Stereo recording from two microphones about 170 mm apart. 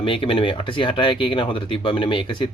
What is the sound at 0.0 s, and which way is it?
Speech, 30° left (ahead or behind).